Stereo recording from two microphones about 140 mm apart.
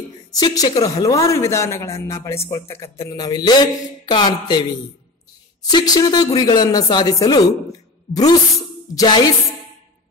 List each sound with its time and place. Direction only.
0.3 s speech: 30° left (ahead or behind)
8.9 s music: 30° left (ahead or behind)